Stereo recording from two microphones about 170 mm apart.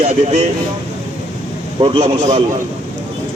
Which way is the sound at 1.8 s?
30° right (ahead or behind).